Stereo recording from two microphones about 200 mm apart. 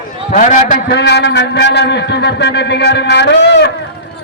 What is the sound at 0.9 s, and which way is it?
A man's voice, 55° left (ahead or behind).